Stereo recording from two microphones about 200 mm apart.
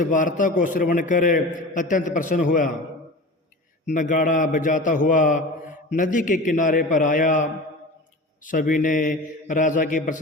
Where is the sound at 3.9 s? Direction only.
40° left (ahead or behind).